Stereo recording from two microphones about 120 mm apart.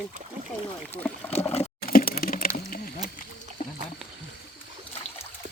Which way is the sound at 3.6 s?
90° left.